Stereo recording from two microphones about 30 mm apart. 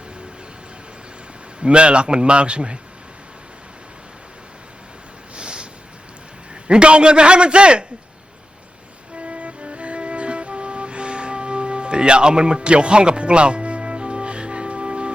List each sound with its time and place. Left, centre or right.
1.5 s a man's voice: right
5.3 s a sound: right
6.5 s a man's voice: right
9.1 s music: right